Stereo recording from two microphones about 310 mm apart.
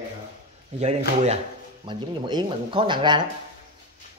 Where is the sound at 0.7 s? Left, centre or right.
Right.